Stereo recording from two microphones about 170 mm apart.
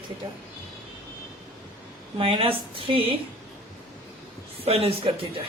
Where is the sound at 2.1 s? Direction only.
30° right (ahead or behind).